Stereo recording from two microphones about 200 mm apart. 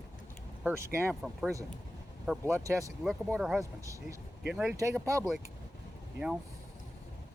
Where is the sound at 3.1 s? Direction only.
5° right (ahead or behind).